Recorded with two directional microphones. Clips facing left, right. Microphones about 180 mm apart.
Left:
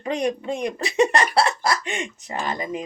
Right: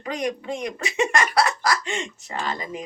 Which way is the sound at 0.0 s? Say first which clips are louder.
Left 3 dB; 30° left (ahead or behind).